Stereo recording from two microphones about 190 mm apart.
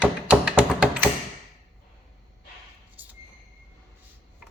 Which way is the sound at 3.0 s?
10° right (ahead or behind).